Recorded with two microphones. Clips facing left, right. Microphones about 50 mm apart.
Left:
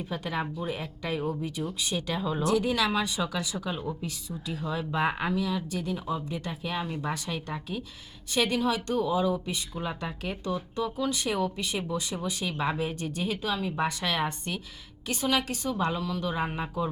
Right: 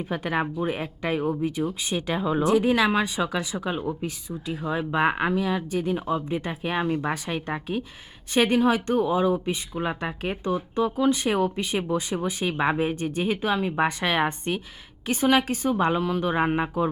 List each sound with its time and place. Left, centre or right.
0.0 s a woman's voice: right
4.7 s a woman's voice: right